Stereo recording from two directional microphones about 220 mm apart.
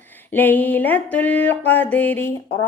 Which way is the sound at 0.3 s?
10° left (ahead or behind).